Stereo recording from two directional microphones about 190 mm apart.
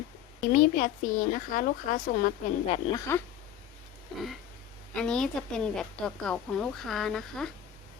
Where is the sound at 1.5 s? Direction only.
45° left (ahead or behind).